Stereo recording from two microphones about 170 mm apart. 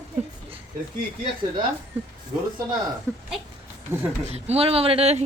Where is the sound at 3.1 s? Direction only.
15° right (ahead or behind).